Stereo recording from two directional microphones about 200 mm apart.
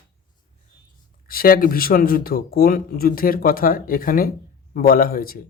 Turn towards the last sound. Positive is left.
turn(degrees=45)  # may be behind; listen again after turning